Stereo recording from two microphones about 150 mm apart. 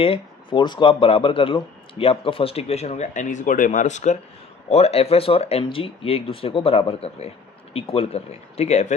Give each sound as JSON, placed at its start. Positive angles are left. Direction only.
{"t": 0.0, "sound": "speech", "side_deg": 35}